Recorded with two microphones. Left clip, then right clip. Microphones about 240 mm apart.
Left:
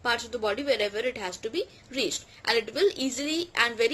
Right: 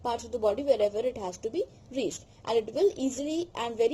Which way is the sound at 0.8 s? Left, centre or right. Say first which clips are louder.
Right 1 dB; centre.